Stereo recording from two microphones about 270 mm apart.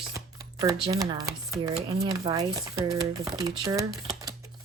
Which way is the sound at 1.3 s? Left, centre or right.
Centre.